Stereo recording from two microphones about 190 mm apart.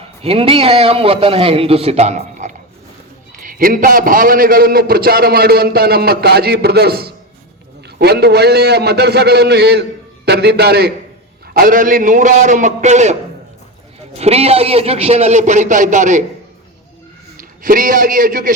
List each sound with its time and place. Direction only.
0.2 s a man's voice: 30° right (ahead or behind)
14.2 s a man's voice: 35° right (ahead or behind)
17.3 s a man's voice: 45° right (ahead or behind)